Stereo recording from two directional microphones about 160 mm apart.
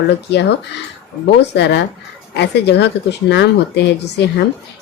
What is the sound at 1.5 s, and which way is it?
Speech, 90° left.